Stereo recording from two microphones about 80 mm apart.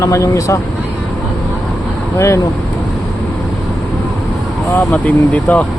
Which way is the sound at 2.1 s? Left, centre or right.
Left.